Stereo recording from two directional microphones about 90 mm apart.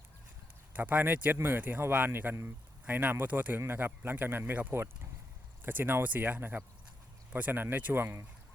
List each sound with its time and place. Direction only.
0.7 s speech: 20° right (ahead or behind)